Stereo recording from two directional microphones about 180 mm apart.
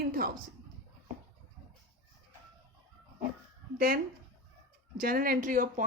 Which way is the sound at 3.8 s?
55° right (ahead or behind).